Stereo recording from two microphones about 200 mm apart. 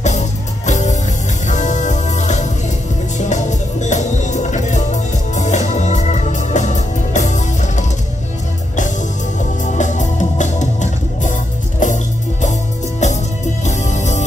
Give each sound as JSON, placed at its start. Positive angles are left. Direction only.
{"t": 0.0, "sound": "music", "side_deg": 35}
{"t": 9.8, "sound": "music", "side_deg": 40}